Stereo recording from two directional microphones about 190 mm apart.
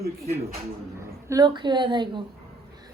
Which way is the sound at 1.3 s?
20° right (ahead or behind).